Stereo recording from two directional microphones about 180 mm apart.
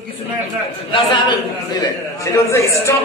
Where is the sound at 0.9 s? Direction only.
25° left (ahead or behind).